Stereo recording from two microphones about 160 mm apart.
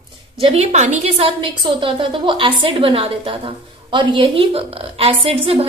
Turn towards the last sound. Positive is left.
turn(degrees=-35)  # may be behind; listen again after turning